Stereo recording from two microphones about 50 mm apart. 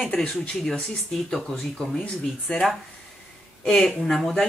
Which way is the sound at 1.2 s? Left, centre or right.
Centre.